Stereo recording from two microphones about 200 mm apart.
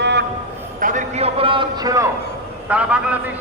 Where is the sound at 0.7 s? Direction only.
40° right (ahead or behind); by 2.1 s 15° right (ahead or behind).